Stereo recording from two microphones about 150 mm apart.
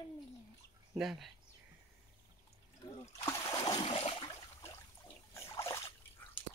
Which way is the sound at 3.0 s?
20° left (ahead or behind).